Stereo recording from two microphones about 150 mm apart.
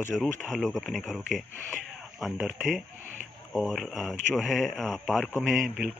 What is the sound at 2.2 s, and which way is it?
Speech, centre (ahead or behind).